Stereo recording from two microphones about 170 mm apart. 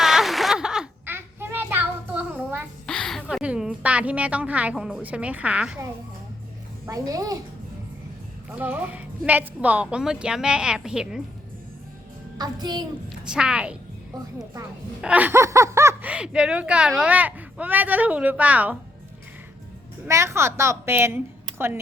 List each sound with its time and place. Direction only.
0.0 s a sound: centre (ahead or behind)
2.8 s a woman's voice: 5° left (ahead or behind)
6.8 s speech: 20° right (ahead or behind)
8.4 s a woman's voice: 10° right (ahead or behind)
12.4 s speech: 25° right (ahead or behind)
13.2 s a woman's voice: 5° right (ahead or behind)
15.0 s speech: 10° right (ahead or behind)
20.1 s speech: 15° right (ahead or behind)